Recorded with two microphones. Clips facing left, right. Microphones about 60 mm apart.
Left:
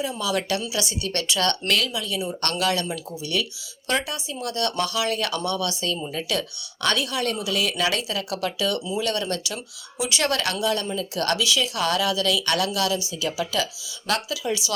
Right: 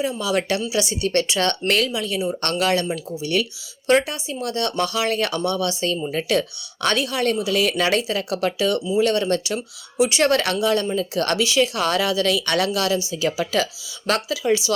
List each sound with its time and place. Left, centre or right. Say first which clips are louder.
0.0 s speech: right 3 dB; right